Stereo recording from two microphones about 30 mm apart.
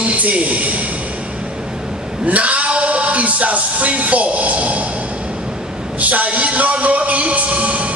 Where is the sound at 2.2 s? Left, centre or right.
Right.